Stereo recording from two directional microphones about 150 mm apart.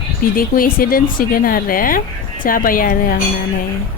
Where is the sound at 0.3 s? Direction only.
70° left (ahead or behind).